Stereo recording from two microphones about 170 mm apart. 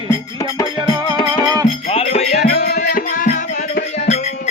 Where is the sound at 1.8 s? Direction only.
35° left (ahead or behind).